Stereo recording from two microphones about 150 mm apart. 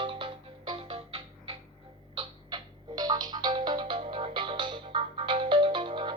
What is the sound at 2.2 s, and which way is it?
Music, 30° right (ahead or behind).